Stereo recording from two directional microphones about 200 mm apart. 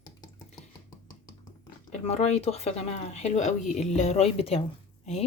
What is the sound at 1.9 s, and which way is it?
Speech, 30° left (ahead or behind).